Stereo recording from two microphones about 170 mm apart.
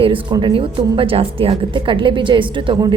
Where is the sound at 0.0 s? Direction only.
30° right (ahead or behind).